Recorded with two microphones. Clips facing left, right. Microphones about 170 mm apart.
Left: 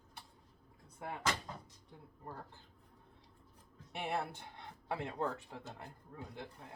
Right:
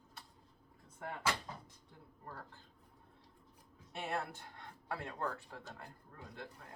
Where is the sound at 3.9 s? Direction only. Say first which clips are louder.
Left 2 dB; 15° left (ahead or behind).